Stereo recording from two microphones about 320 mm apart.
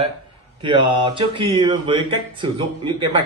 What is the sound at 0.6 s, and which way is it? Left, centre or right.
Speech, centre.